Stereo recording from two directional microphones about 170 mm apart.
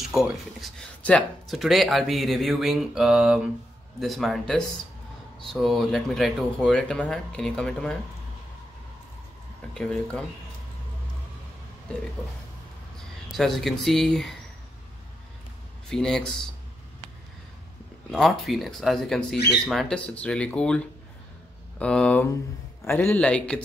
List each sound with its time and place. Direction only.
0.0 s speech: centre (ahead or behind)
9.8 s speech: 5° left (ahead or behind)
13.4 s speech: centre (ahead or behind)
15.9 s speech: 5° left (ahead or behind)
18.1 s a man's voice: centre (ahead or behind)